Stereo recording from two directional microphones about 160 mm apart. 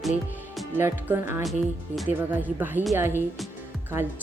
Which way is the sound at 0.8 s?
15° right (ahead or behind).